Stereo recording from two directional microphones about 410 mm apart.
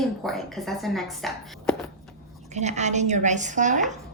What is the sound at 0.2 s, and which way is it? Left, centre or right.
A woman's voice, centre.